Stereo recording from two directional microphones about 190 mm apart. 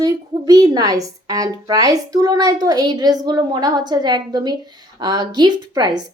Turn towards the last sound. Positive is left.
turn(degrees=-20)  # may be behind; listen again after turning